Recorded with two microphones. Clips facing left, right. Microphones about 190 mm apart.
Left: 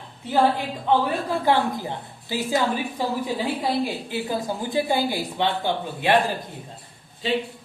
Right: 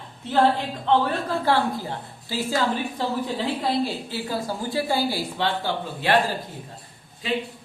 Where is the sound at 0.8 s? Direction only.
15° left (ahead or behind).